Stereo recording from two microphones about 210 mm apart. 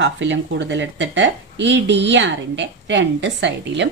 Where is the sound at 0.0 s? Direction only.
60° right (ahead or behind).